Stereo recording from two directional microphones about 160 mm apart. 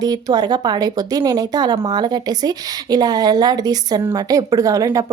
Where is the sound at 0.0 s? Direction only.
25° right (ahead or behind).